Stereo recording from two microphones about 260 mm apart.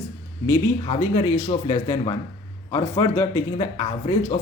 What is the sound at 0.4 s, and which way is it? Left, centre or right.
Speech, centre.